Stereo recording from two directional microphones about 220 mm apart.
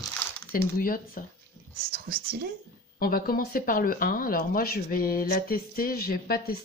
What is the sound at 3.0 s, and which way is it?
Speech, 40° left (ahead or behind).